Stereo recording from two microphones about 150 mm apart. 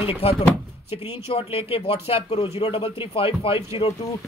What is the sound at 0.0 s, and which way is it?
Speech, 40° left (ahead or behind).